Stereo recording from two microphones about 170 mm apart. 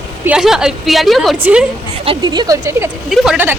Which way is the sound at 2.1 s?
25° right (ahead or behind).